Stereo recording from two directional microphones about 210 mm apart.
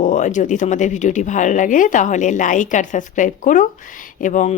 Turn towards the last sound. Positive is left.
turn(degrees=35)  # may be behind; listen again after turning